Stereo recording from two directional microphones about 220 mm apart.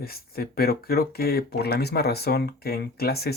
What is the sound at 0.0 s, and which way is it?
Speech, 45° left (ahead or behind).